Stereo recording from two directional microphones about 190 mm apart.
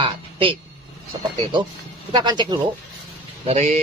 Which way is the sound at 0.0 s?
25° right (ahead or behind).